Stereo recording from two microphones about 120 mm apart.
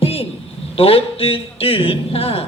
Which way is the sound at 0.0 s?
55° left (ahead or behind).